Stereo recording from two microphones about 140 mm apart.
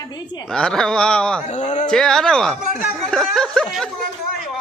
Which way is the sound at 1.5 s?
55° left (ahead or behind).